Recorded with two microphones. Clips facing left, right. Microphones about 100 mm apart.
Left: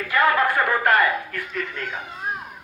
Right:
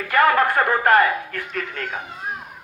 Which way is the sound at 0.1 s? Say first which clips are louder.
Right 3 dB; 45° right (ahead or behind).